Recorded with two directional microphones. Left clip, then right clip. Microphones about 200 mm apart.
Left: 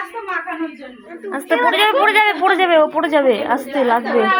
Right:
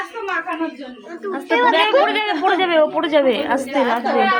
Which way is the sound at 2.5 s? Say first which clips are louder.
Left 2 dB; 30° left (ahead or behind).